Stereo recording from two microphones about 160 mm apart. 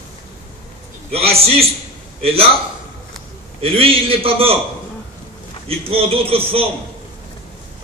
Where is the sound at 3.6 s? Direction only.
35° right (ahead or behind).